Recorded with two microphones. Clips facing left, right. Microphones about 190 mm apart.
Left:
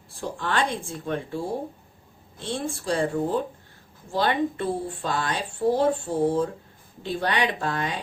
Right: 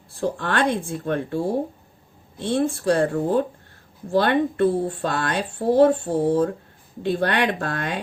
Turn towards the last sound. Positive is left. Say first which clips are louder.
# right 2 dB
turn(degrees=-60)  # may be behind; listen again after turning